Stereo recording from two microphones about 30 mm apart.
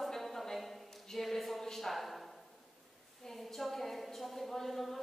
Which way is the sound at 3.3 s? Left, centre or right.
Centre.